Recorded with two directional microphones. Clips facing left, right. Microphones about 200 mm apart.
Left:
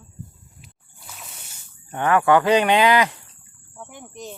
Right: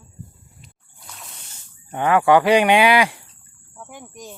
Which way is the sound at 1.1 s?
5° left (ahead or behind).